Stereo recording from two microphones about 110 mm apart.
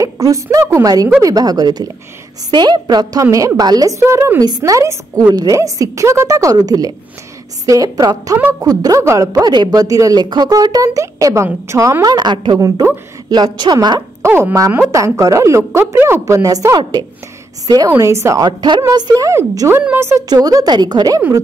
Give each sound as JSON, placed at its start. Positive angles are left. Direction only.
{"t": 0.0, "sound": "a woman's voice", "side_deg": -30}
{"t": 4.0, "sound": "a woman's voice", "side_deg": -20}
{"t": 4.4, "sound": "a man's voice", "side_deg": -35}
{"t": 8.4, "sound": "a woman's voice", "side_deg": -15}
{"t": 8.6, "sound": "a man's voice", "side_deg": -35}
{"t": 14.2, "sound": "a woman's voice", "side_deg": -25}